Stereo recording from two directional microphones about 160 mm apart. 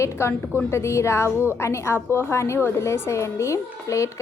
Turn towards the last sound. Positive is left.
turn(degrees=20)  # may be behind; listen again after turning